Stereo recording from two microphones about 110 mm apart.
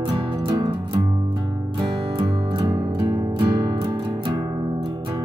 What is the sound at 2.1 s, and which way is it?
Music, 45° right (ahead or behind).